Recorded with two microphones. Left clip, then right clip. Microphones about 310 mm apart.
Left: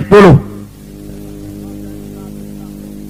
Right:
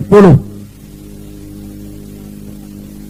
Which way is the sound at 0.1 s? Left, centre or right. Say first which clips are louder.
Left 2 dB; left.